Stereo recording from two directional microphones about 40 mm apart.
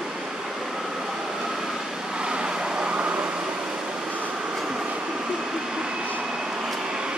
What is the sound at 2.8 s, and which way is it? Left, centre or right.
Vehicle, right.